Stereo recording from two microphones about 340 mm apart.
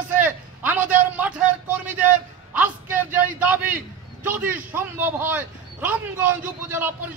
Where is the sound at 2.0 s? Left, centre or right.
Centre.